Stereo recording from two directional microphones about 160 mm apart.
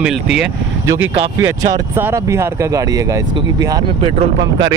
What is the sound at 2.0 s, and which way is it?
Speech, 15° right (ahead or behind).